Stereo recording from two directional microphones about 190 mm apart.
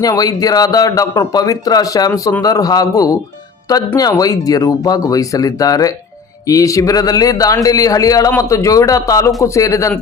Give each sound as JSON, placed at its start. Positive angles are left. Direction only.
{"t": 0.0, "sound": "speech", "side_deg": 20}